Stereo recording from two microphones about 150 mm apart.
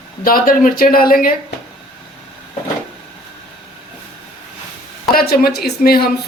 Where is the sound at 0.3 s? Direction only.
70° left (ahead or behind).